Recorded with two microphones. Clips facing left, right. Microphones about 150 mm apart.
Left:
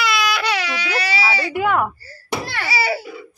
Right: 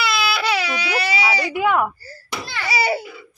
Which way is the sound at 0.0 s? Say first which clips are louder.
Left 1 dB; 5° right (ahead or behind).